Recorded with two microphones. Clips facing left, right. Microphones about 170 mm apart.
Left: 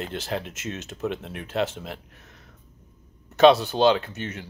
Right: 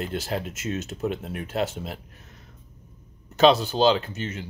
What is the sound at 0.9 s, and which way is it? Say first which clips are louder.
Speech: right 1 dB; 5° right (ahead or behind).